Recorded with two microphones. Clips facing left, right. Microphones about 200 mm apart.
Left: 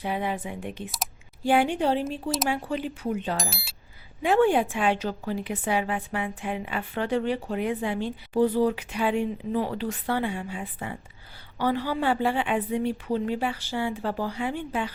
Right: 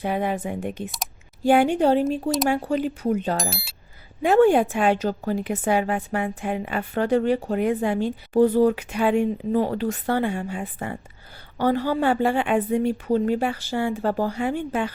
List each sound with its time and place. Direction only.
0.0 s a woman's voice: 50° right (ahead or behind)
3.3 s speech: centre (ahead or behind)
4.2 s a woman's voice: 45° right (ahead or behind)